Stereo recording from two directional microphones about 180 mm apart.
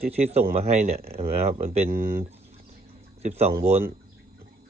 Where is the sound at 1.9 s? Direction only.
55° right (ahead or behind).